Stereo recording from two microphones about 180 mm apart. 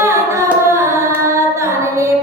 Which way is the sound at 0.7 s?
15° right (ahead or behind).